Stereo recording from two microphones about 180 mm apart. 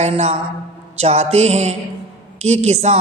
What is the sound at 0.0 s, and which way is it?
A man's voice, 35° right (ahead or behind).